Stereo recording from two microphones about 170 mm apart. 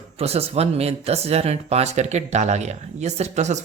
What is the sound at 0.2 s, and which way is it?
Speech, 35° right (ahead or behind).